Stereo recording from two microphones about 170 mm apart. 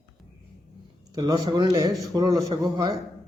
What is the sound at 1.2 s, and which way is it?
A man's voice, 25° right (ahead or behind).